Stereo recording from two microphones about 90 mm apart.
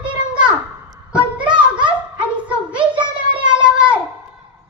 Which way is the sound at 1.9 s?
15° right (ahead or behind).